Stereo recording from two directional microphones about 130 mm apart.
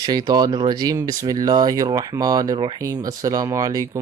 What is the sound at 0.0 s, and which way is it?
Speech, 30° right (ahead or behind).